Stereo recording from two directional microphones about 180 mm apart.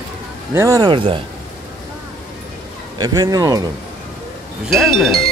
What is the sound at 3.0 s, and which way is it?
Speech, 20° right (ahead or behind).